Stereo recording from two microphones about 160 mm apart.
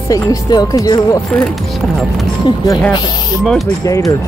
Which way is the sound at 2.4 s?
25° left (ahead or behind).